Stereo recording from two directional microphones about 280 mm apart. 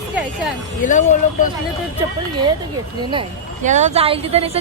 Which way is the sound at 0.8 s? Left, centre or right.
Left.